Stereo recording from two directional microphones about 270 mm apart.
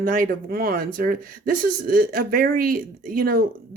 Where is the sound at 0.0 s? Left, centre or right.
Right.